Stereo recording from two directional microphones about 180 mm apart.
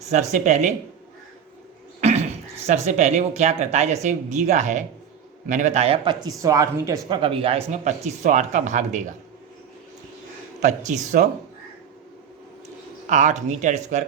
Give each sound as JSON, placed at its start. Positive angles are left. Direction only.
{"t": 0.1, "sound": "speech", "side_deg": -40}
{"t": 2.0, "sound": "a sound", "side_deg": -35}
{"t": 2.6, "sound": "speech", "side_deg": -40}
{"t": 7.2, "sound": "speech", "side_deg": -30}
{"t": 10.6, "sound": "a man's voice", "side_deg": -40}
{"t": 13.1, "sound": "speech", "side_deg": -40}